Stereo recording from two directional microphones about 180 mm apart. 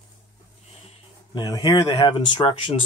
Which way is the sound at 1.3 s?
25° left (ahead or behind).